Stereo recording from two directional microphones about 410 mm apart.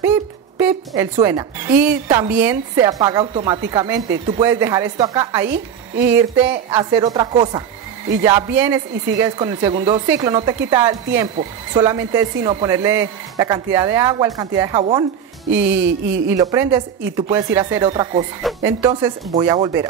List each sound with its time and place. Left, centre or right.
0.0 s a woman's voice: centre
15.5 s music: right
16.3 s a woman's voice: centre